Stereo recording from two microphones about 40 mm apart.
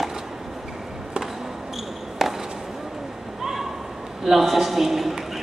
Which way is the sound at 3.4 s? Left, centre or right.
Centre.